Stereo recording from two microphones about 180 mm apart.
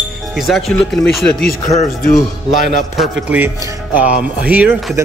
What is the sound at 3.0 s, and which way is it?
Speech, 10° right (ahead or behind).